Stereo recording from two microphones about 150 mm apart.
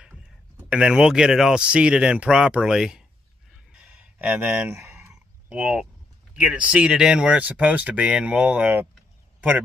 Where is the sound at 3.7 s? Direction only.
5° right (ahead or behind).